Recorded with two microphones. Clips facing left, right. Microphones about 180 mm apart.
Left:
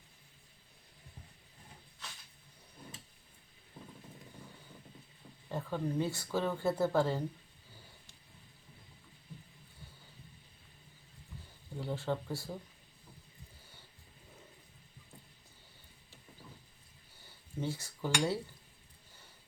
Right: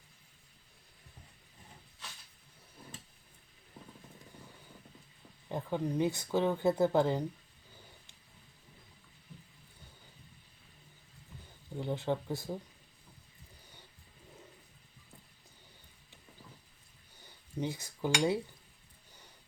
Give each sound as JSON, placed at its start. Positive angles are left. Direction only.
{"t": 5.5, "sound": "speech", "side_deg": -15}
{"t": 11.8, "sound": "speech", "side_deg": -20}
{"t": 17.2, "sound": "cutlery", "side_deg": -15}